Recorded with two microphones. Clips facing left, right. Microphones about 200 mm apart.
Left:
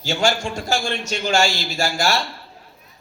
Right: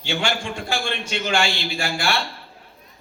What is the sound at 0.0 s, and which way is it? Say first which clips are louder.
A man's voice: left 4 dB; 45° left (ahead or behind).